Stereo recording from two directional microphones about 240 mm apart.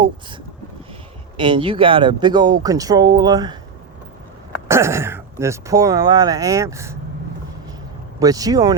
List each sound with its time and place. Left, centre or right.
1.4 s speech: right
4.7 s speech: centre
8.2 s speech: centre